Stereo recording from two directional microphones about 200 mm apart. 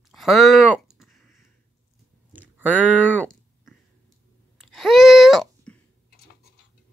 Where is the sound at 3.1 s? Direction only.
Centre (ahead or behind).